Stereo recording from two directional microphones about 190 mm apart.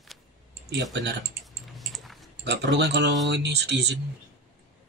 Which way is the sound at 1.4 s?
Centre (ahead or behind).